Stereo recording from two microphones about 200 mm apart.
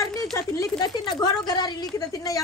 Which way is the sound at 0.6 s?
20° left (ahead or behind).